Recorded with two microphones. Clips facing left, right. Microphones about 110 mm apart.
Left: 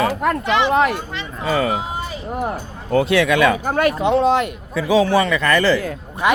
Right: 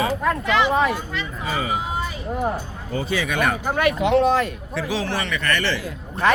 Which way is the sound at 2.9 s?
80° left.